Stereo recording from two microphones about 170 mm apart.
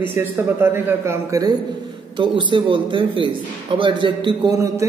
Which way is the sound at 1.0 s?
15° right (ahead or behind).